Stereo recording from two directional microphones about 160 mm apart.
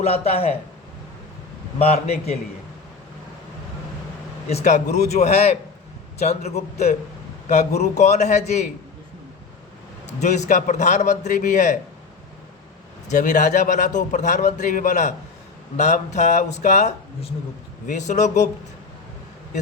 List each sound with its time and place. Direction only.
0.0 s a man's voice: 40° left (ahead or behind)
1.8 s a man's voice: 40° left (ahead or behind)
4.4 s a man's voice: 45° left (ahead or behind)
10.1 s a man's voice: 45° left (ahead or behind)
13.1 s a man's voice: 50° left (ahead or behind)